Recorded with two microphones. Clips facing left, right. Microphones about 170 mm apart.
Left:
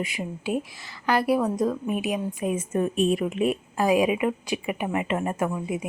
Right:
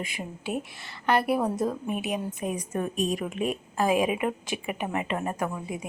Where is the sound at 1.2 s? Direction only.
5° right (ahead or behind).